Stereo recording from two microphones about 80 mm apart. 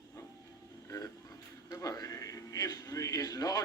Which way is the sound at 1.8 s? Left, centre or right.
Left.